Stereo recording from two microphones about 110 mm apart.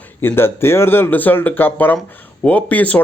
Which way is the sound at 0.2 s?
20° left (ahead or behind).